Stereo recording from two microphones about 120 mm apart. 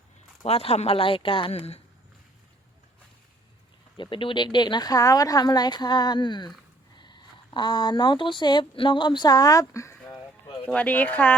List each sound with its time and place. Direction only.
0.4 s speech: 55° left (ahead or behind)
3.9 s speech: 45° left (ahead or behind); by 10.0 s 25° left (ahead or behind)
10.7 s speech: 15° left (ahead or behind)